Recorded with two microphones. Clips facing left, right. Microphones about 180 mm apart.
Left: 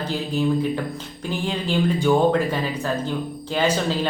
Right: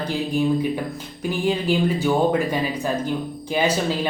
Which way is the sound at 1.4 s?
10° right (ahead or behind).